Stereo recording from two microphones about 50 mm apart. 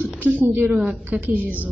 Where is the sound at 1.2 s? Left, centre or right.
Right.